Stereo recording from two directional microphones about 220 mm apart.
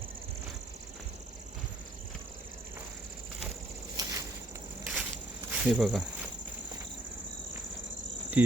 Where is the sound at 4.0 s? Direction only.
15° right (ahead or behind).